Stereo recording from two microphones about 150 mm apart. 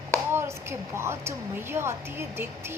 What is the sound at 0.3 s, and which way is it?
A woman's voice, 15° right (ahead or behind).